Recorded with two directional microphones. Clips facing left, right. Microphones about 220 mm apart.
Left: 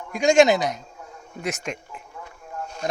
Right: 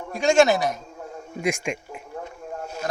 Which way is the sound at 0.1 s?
15° left (ahead or behind).